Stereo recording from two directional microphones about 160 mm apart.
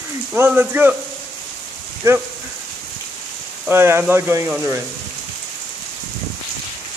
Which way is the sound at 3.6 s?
15° right (ahead or behind).